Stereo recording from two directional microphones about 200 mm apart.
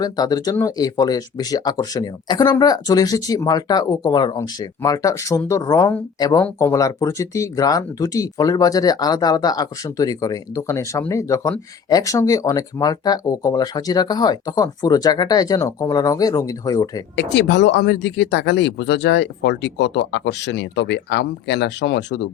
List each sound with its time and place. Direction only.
0.0 s speech: 20° left (ahead or behind)
17.2 s speech: 60° left (ahead or behind)